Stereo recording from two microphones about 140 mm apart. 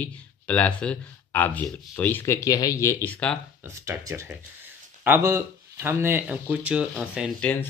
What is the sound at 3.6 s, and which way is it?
Speech, 20° right (ahead or behind).